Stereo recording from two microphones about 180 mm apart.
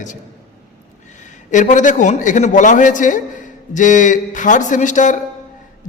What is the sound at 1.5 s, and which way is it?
Speech, 45° left (ahead or behind).